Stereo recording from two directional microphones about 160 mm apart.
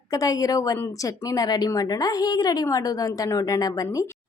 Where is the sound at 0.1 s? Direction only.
20° left (ahead or behind).